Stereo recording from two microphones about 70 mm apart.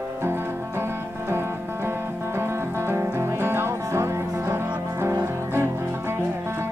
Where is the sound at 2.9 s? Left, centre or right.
Right.